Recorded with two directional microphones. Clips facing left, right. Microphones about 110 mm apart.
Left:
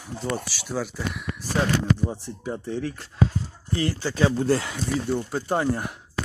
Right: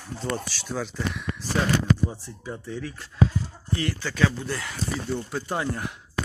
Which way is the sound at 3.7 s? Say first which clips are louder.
Left 3 dB; 30° left (ahead or behind).